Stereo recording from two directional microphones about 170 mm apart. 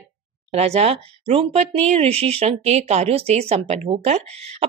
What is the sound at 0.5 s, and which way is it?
Speech, 40° right (ahead or behind).